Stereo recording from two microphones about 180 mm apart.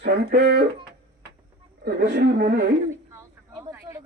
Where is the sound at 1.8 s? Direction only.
65° right (ahead or behind).